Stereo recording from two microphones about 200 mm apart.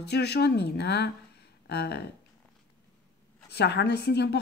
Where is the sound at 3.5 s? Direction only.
55° left (ahead or behind).